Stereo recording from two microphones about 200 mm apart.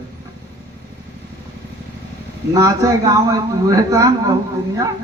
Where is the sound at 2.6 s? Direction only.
15° right (ahead or behind).